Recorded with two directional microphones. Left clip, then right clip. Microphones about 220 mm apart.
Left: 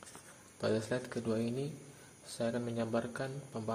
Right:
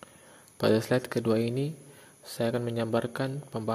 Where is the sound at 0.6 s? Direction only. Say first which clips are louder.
Right 9 dB; 40° right (ahead or behind).